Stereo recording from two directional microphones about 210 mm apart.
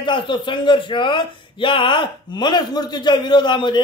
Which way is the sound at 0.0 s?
20° left (ahead or behind).